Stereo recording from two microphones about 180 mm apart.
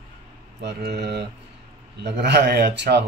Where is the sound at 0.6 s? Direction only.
70° right (ahead or behind).